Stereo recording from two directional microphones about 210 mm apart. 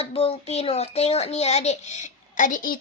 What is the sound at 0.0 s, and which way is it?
A child's voice, 30° left (ahead or behind).